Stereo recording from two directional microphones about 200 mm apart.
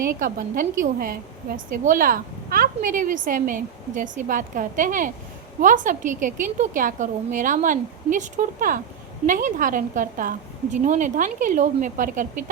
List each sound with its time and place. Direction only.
0.0 s a woman's voice: 45° right (ahead or behind)